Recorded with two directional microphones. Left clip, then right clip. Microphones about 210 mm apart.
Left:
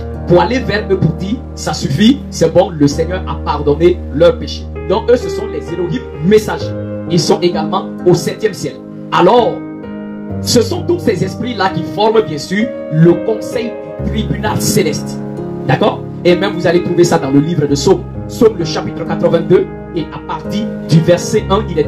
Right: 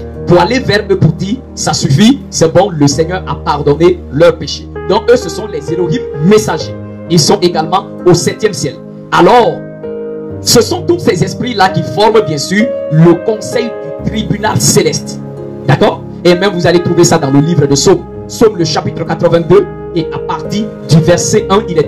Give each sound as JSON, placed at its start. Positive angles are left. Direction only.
{"t": 0.3, "sound": "speech", "side_deg": -50}
{"t": 10.4, "sound": "speech", "side_deg": -50}